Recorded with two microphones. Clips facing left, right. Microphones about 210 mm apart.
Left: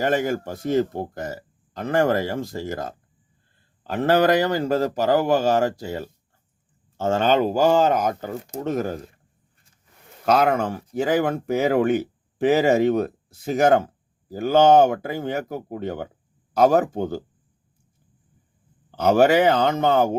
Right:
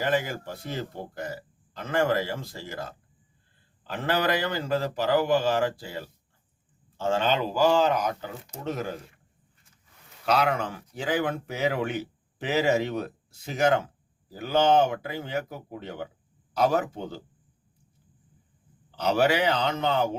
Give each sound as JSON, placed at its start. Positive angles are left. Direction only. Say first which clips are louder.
{"t": 0.0, "sound": "speech", "louder": "left 5 dB", "side_deg": 45}
{"t": 10.2, "sound": "speech", "louder": "left 6 dB", "side_deg": 45}
{"t": 18.9, "sound": "speech", "louder": "left 7 dB", "side_deg": 50}